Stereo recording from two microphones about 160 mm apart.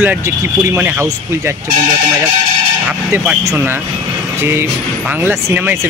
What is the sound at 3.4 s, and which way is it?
Speech, 20° right (ahead or behind).